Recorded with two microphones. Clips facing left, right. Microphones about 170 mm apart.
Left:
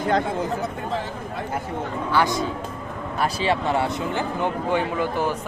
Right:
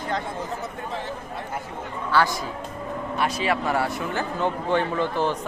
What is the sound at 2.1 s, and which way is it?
A man's voice, 20° left (ahead or behind).